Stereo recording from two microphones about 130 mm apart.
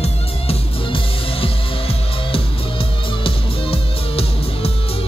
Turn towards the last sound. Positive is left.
turn(degrees=50)  # may be behind; listen again after turning